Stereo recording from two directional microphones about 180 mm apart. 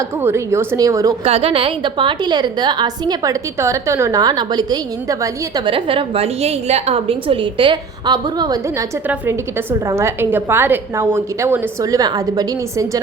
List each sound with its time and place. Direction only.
0.2 s a woman's voice: 15° right (ahead or behind)
1.2 s a woman's voice: 35° right (ahead or behind)
9.0 s a woman's voice: 10° right (ahead or behind)